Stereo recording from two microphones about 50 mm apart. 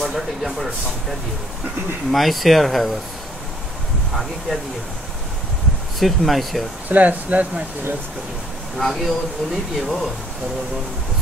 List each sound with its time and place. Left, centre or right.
0.0 s speech: centre
2.0 s speech: centre
4.1 s speech: centre
5.9 s speech: centre
6.9 s speech: right
8.7 s speech: centre